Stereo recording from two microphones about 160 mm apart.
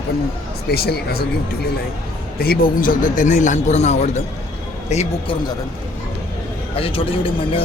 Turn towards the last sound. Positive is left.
turn(degrees=35)  # may be behind; listen again after turning